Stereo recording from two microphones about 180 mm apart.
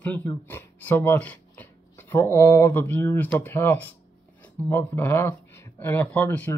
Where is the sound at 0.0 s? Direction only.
10° left (ahead or behind).